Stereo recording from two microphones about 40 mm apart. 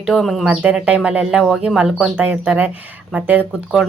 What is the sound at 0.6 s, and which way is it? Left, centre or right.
Speech, right.